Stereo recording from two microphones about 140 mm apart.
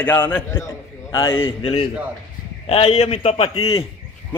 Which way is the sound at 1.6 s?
45° left (ahead or behind).